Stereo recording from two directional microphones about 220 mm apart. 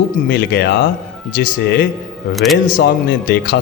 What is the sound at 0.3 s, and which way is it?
Speech, 50° left (ahead or behind).